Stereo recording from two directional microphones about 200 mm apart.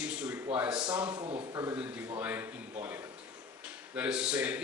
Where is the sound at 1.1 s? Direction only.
25° right (ahead or behind).